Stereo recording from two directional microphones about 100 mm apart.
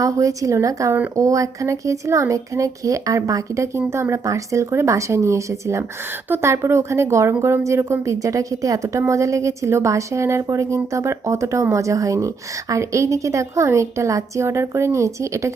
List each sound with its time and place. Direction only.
0.0 s speech: 35° right (ahead or behind)